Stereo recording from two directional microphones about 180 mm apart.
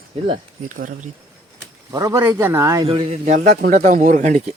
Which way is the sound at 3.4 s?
60° right (ahead or behind).